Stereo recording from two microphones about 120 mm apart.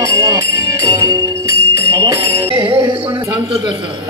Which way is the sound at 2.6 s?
45° right (ahead or behind).